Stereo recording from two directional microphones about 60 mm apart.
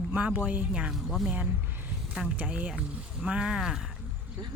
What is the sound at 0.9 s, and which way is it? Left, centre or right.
Speech, centre.